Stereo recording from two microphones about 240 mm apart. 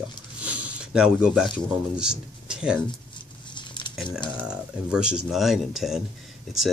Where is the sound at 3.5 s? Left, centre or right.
Centre.